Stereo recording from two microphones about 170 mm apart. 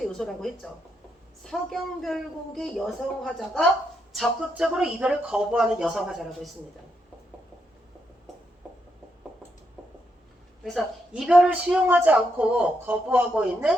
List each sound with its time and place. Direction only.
0.2 s speech: 5° left (ahead or behind)
10.6 s speech: centre (ahead or behind)